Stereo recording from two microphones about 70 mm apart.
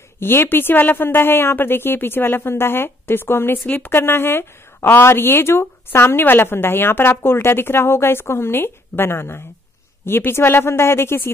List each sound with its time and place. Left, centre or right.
0.2 s a woman's voice: left